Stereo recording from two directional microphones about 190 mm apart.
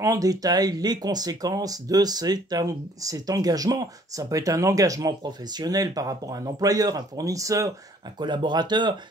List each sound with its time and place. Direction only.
0.0 s speech: 20° right (ahead or behind)